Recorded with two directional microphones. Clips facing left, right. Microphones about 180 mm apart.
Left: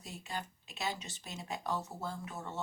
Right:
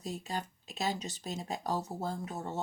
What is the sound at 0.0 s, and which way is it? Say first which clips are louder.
Speech: right 5 dB; 40° right (ahead or behind).